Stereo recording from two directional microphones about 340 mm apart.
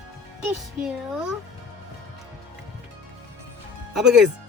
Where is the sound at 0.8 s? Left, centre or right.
Centre.